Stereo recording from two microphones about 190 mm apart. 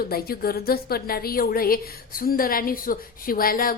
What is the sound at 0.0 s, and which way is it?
A woman's voice, 50° left (ahead or behind).